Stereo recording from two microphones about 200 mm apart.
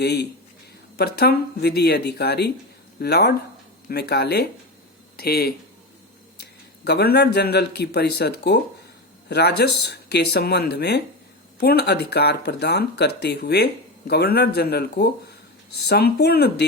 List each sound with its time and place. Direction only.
0.0 s speech: 55° left (ahead or behind)